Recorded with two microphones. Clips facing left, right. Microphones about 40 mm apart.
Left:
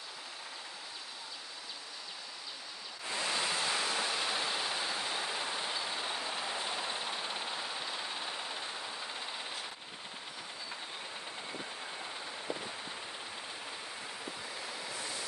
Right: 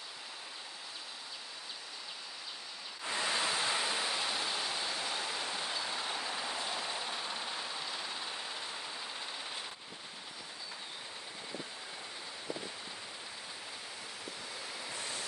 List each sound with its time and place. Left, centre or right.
3.3 s a sound: centre
6.3 s vehicle: centre
14.6 s waves: centre
15.0 s waves: left